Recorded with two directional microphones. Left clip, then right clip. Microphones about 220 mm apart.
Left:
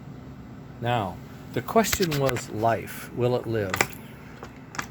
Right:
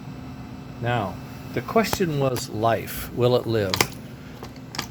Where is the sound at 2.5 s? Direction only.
Centre (ahead or behind).